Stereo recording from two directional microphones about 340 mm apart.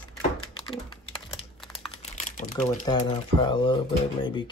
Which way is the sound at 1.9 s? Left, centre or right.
Centre.